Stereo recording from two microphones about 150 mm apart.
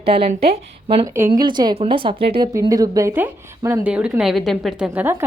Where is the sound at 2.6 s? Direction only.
25° right (ahead or behind).